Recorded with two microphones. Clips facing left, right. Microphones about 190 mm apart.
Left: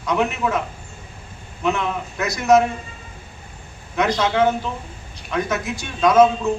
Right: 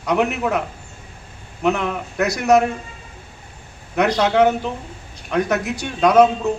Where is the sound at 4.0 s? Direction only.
65° right (ahead or behind).